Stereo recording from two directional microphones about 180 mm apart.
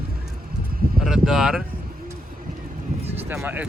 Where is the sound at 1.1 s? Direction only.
Centre (ahead or behind).